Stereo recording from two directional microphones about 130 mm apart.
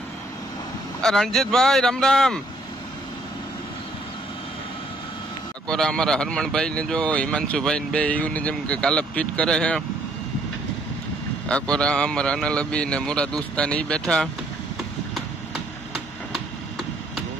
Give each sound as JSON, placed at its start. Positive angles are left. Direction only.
{"t": 1.0, "sound": "speech", "side_deg": 5}
{"t": 5.7, "sound": "a man's voice", "side_deg": 5}
{"t": 11.4, "sound": "a man's voice", "side_deg": 5}